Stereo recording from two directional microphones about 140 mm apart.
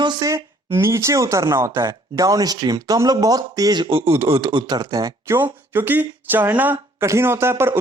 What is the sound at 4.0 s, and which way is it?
Speech, 45° right (ahead or behind).